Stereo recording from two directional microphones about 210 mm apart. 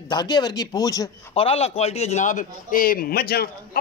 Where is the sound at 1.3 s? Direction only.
25° left (ahead or behind); by 3.4 s 50° left (ahead or behind).